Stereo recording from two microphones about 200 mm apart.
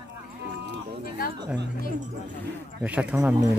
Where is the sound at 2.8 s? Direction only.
5° right (ahead or behind).